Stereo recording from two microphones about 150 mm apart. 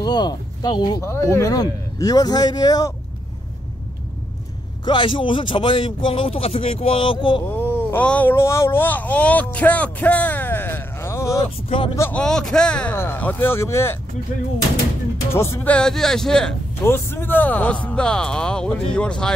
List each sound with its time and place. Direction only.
0.0 s speech: 25° left (ahead or behind)
4.8 s speech: 35° left (ahead or behind)
7.4 s speech: 10° left (ahead or behind)
12.1 s speech: 5° left (ahead or behind)
15.3 s speech: 15° left (ahead or behind)
16.8 s speech: 15° left (ahead or behind)